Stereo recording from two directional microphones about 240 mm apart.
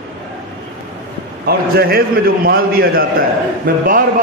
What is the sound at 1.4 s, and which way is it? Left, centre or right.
A man's voice, right.